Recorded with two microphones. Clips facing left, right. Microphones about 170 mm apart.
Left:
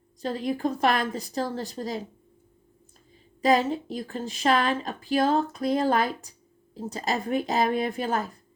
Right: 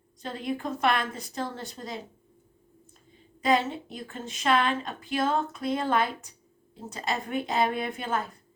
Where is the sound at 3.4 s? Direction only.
40° left (ahead or behind).